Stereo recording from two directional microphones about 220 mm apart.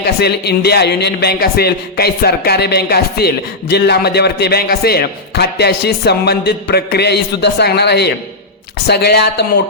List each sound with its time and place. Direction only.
0.0 s a man's voice: 50° left (ahead or behind)